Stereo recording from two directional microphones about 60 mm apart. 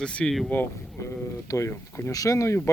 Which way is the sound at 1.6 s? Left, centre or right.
Left.